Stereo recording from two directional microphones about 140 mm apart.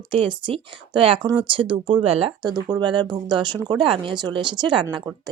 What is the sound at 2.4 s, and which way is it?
Speech, 30° right (ahead or behind).